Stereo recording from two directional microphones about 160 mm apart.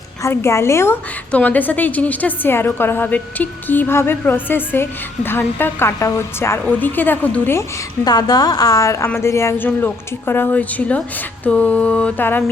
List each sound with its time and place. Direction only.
0.2 s a woman's voice: 15° left (ahead or behind)
8.0 s a woman's voice: 25° left (ahead or behind)